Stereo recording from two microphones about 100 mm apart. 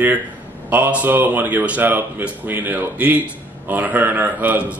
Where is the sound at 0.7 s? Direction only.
15° right (ahead or behind).